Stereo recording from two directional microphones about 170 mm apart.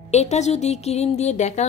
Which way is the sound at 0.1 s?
40° left (ahead or behind).